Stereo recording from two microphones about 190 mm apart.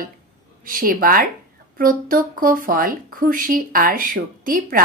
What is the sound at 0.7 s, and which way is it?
Speech, 50° right (ahead or behind).